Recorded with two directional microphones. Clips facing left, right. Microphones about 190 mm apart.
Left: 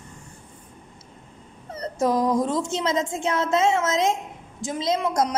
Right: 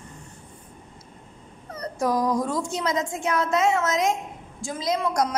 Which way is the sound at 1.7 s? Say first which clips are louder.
Left 2 dB; 25° left (ahead or behind).